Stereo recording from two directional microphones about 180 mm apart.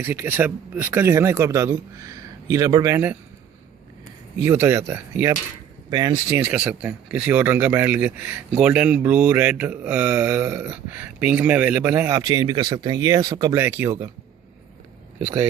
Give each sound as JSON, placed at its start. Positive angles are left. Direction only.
{"t": 0.0, "sound": "speech", "side_deg": -15}
{"t": 4.4, "sound": "speech", "side_deg": -10}